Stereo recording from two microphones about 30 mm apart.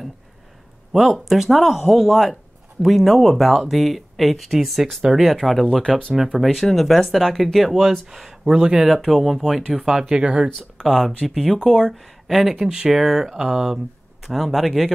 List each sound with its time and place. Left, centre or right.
1.2 s speech: centre
5.8 s speech: left
6.2 s speech: centre
8.1 s speech: centre
8.8 s speech: centre
9.4 s speech: centre
10.2 s speech: right
10.8 s speech: centre
11.5 s speech: centre
12.5 s speech: right
12.9 s speech: centre
14.2 s speech: centre